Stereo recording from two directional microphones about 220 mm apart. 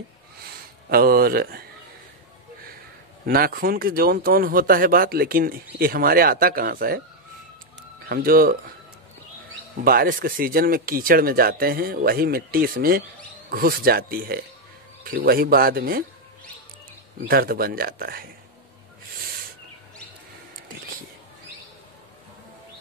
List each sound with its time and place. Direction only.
0.8 s speech: 45° right (ahead or behind)
3.3 s speech: 40° right (ahead or behind)
8.1 s speech: 40° right (ahead or behind)
9.8 s speech: 40° right (ahead or behind)
17.2 s speech: 45° right (ahead or behind)